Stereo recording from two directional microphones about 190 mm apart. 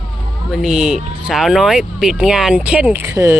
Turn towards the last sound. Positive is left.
turn(degrees=-10)  # may be behind; listen again after turning